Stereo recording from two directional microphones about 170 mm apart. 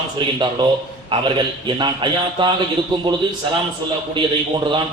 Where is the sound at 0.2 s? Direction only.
25° right (ahead or behind).